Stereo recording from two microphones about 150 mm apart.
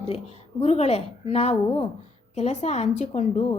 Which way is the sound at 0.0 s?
45° left (ahead or behind).